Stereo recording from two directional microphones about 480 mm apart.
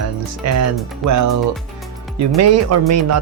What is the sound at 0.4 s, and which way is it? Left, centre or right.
Speech, right.